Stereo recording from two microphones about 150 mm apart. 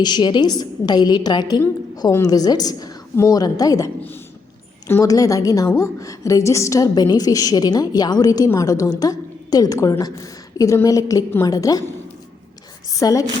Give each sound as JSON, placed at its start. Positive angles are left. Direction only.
{"t": 0.0, "sound": "a woman's voice", "side_deg": 30}
{"t": 4.9, "sound": "a woman's voice", "side_deg": 20}
{"t": 12.9, "sound": "a woman's voice", "side_deg": 25}